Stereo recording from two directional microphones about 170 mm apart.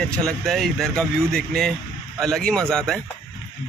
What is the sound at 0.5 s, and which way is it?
Speech, centre (ahead or behind).